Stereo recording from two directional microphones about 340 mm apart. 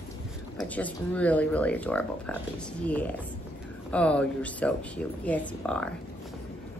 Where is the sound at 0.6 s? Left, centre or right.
Centre.